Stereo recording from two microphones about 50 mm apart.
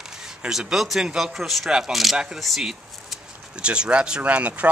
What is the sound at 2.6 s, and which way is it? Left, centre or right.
Speech, centre.